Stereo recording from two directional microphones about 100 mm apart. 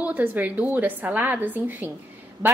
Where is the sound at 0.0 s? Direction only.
15° right (ahead or behind).